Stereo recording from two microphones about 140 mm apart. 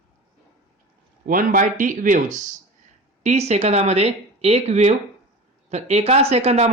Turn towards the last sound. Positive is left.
turn(degrees=-50)  # may be behind; listen again after turning